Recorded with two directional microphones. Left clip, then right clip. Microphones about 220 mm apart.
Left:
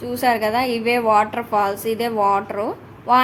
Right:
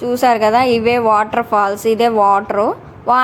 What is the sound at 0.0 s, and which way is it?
A woman's voice, 15° right (ahead or behind).